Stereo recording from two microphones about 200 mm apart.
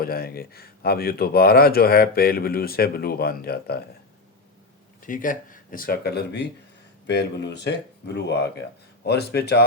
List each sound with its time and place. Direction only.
0.0 s speech: 50° left (ahead or behind)
5.0 s speech: 40° left (ahead or behind)